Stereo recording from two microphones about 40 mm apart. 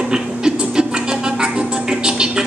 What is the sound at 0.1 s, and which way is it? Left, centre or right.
Music, centre.